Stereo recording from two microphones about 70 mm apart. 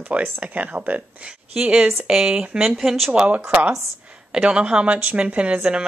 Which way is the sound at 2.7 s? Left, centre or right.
Centre.